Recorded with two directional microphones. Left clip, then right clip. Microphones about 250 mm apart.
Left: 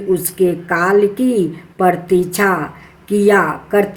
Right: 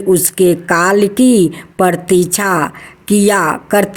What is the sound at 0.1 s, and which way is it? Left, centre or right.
A woman's voice, right.